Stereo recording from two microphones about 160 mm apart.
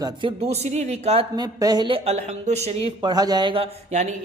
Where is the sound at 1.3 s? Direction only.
25° right (ahead or behind); by 2.8 s 45° right (ahead or behind).